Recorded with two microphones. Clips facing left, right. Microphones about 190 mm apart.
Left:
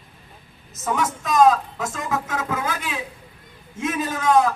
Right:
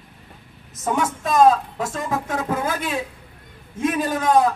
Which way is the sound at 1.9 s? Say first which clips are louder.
Right 1 dB; 30° right (ahead or behind).